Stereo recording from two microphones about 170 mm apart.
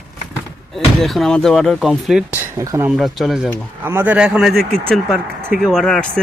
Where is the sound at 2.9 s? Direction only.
Centre (ahead or behind).